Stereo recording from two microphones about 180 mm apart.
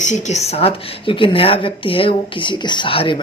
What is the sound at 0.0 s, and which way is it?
Speech, 40° left (ahead or behind).